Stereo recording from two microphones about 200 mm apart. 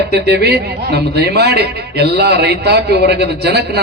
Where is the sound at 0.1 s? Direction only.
55° right (ahead or behind).